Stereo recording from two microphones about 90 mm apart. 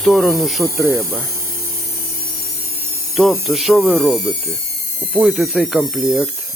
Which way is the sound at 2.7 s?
25° right (ahead or behind).